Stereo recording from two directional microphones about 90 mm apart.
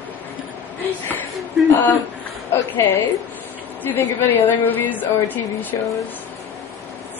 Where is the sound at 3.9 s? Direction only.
20° left (ahead or behind).